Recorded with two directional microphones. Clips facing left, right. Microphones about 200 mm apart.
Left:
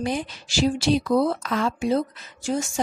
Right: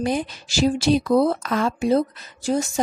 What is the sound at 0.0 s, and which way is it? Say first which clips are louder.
Speech: right 3 dB; 40° right (ahead or behind).